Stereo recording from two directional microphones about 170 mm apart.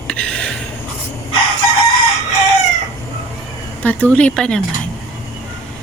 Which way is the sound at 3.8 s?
10° left (ahead or behind).